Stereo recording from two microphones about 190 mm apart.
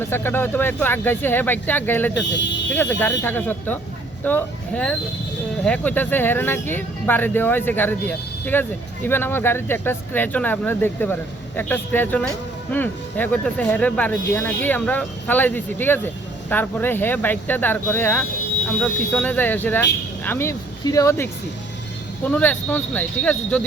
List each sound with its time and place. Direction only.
0.0 s speech: 10° left (ahead or behind)
2.2 s speech: 70° left (ahead or behind)
3.0 s speech: 10° left (ahead or behind)